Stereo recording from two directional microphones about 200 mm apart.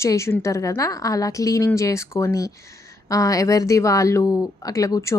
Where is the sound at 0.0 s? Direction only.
15° left (ahead or behind).